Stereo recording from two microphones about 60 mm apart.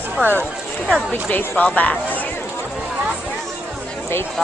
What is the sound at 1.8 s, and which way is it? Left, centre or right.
Speech, left.